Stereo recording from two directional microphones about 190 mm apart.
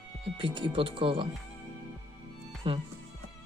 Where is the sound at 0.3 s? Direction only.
25° right (ahead or behind).